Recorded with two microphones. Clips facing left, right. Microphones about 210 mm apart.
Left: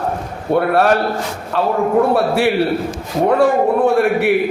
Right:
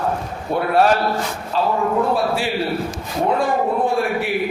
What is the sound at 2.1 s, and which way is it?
Speech, 65° left (ahead or behind).